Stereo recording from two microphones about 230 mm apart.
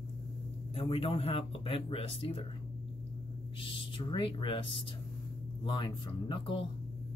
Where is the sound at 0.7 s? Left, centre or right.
Left.